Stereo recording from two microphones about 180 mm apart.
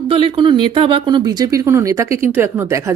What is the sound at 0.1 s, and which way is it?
Speech, 30° right (ahead or behind).